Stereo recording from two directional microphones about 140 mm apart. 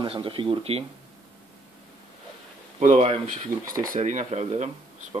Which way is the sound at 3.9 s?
60° right (ahead or behind).